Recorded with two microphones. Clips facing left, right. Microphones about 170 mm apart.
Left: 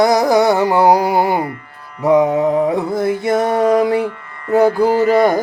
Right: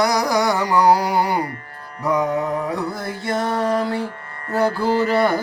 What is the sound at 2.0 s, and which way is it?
Mantra, 25° left (ahead or behind).